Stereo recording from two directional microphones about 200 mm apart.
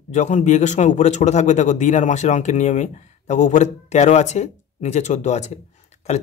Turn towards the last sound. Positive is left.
turn(degrees=35)  # may be behind; listen again after turning